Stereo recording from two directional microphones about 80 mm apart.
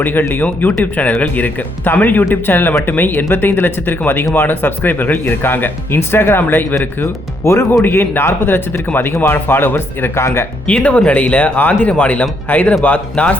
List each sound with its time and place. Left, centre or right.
0.0 s speech: left
10.7 s speech: centre